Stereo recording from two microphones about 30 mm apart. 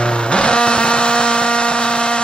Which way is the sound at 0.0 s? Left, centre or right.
Left.